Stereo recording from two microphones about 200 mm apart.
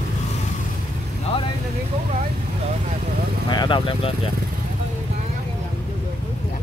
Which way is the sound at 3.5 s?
20° left (ahead or behind).